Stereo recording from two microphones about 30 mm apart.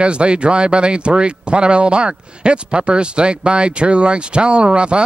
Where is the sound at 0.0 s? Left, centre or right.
Right.